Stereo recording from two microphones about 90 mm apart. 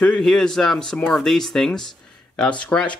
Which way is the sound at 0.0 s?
5° left (ahead or behind).